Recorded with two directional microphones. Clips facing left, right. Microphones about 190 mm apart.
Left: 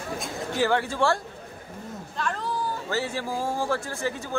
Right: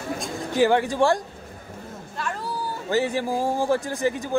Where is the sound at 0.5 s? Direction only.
15° right (ahead or behind).